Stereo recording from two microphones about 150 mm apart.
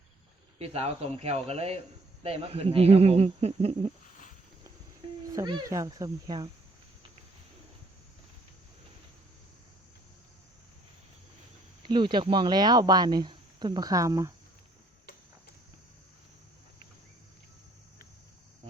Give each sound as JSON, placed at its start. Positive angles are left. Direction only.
{"t": 0.6, "sound": "speech", "side_deg": -40}
{"t": 5.3, "sound": "speech", "side_deg": -25}
{"t": 11.9, "sound": "speech", "side_deg": -30}